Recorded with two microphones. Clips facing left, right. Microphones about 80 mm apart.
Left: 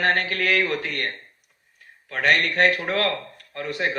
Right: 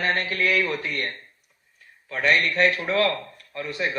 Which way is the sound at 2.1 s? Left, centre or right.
Left.